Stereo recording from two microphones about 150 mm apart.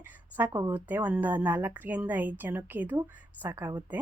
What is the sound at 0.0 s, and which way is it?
Speech, 10° right (ahead or behind).